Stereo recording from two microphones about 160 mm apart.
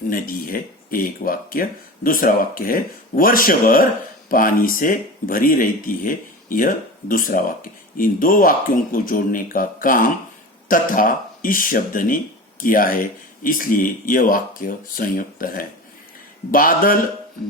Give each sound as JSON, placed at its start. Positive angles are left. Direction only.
{"t": 0.1, "sound": "speech", "side_deg": 60}